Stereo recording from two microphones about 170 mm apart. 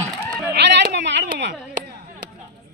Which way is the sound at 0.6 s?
90° right.